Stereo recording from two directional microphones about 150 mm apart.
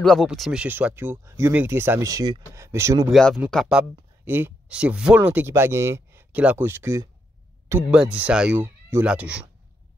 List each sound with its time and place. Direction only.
0.0 s speech: centre (ahead or behind); by 3.1 s 20° right (ahead or behind)
3.1 s speech: 5° left (ahead or behind)
3.6 s speech: 10° right (ahead or behind)